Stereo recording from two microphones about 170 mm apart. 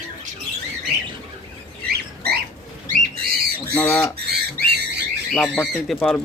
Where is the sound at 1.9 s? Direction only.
70° right (ahead or behind).